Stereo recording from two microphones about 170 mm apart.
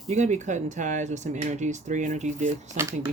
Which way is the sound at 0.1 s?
45° right (ahead or behind).